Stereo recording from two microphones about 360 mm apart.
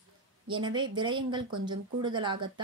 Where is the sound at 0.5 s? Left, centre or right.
Centre.